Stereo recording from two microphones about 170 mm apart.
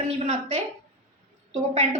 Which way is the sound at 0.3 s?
35° right (ahead or behind).